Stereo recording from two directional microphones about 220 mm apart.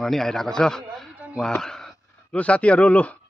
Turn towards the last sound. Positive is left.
turn(degrees=5)  # may be behind; listen again after turning